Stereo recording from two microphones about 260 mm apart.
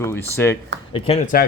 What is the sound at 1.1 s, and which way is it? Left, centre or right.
Speech, left.